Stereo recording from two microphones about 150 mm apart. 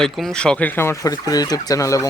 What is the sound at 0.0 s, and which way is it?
Speech, 5° left (ahead or behind).